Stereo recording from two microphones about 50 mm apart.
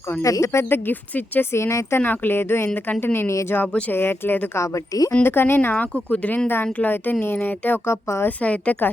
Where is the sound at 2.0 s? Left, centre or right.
Left.